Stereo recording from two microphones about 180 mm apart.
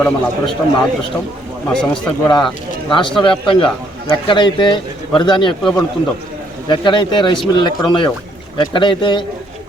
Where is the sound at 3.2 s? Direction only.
30° left (ahead or behind).